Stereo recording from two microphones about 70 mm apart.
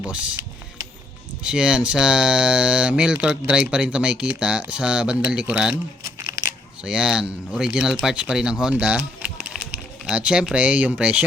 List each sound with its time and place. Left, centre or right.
0.0 s speech: centre
1.5 s speech: centre
6.8 s speech: centre
9.0 s a sound: centre
10.1 s speech: centre